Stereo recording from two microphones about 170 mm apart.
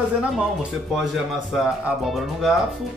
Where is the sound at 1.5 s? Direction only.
Centre (ahead or behind).